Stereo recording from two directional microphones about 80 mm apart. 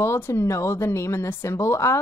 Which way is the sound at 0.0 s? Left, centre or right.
Left.